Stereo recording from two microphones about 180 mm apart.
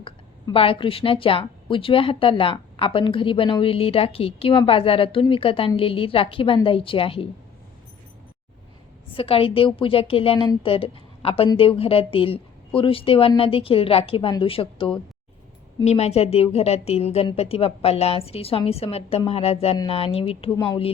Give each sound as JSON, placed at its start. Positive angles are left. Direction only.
{"t": 0.0, "sound": "a woman's voice", "side_deg": 30}
{"t": 9.1, "sound": "a woman's voice", "side_deg": 30}